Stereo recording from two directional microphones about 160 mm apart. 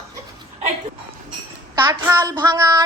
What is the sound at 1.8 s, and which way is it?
A woman's voice, 20° right (ahead or behind).